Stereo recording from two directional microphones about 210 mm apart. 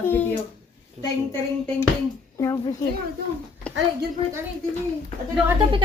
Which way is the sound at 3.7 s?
5° left (ahead or behind).